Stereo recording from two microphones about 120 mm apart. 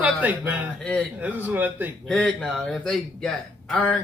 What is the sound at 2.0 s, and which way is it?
Speech, 5° left (ahead or behind).